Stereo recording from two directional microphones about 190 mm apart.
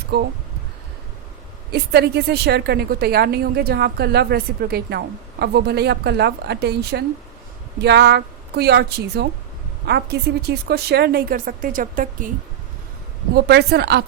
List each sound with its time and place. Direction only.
0.1 s a woman's voice: 60° right (ahead or behind)
1.7 s a woman's voice: 60° right (ahead or behind)
13.3 s a woman's voice: 60° right (ahead or behind)